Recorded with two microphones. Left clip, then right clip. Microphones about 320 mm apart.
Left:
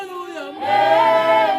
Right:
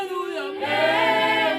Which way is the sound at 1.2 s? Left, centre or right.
Centre.